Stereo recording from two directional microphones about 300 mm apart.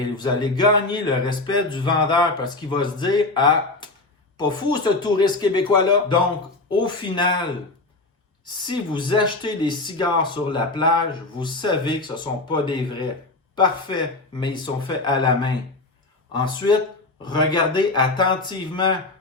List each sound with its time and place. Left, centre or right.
0.2 s speech: centre
8.4 s speech: centre